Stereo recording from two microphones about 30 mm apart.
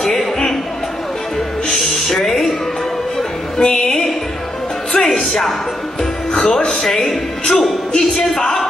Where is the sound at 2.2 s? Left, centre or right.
Centre.